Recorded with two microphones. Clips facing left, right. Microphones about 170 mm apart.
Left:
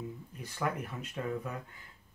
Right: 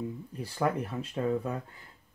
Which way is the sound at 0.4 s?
35° right (ahead or behind).